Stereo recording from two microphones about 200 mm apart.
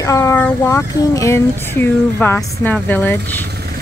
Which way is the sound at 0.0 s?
15° left (ahead or behind).